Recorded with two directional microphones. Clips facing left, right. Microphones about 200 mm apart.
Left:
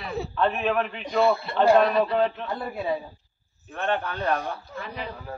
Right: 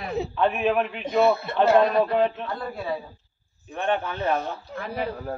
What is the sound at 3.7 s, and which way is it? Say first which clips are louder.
Speech: right 1 dB; 15° right (ahead or behind).